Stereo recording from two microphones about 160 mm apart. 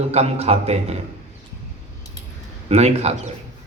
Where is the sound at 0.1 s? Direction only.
40° right (ahead or behind).